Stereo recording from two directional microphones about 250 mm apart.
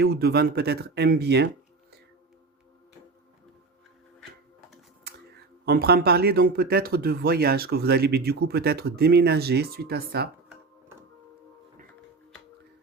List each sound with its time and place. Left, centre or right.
0.0 s speech: right
5.6 s speech: right